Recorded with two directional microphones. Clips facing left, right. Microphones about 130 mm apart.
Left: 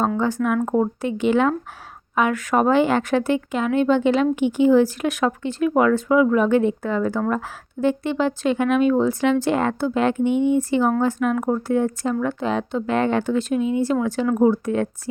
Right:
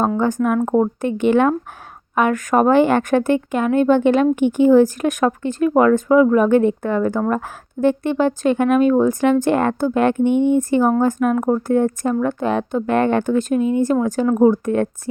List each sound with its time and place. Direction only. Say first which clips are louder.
0.4 s a woman's voice: right 3 dB; 45° right (ahead or behind)